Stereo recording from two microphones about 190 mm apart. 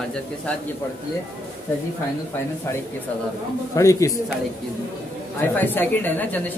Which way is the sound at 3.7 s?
15° left (ahead or behind).